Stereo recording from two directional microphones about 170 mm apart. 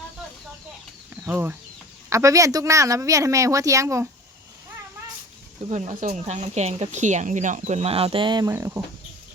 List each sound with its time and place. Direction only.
1.1 s a sound: 10° right (ahead or behind)
2.0 s speech: 20° right (ahead or behind)
5.6 s speech: 45° right (ahead or behind); by 8.8 s 15° right (ahead or behind)